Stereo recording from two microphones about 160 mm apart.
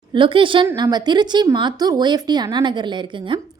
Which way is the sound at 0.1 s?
30° right (ahead or behind).